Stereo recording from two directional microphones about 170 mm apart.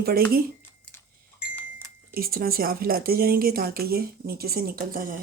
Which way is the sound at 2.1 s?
60° right (ahead or behind).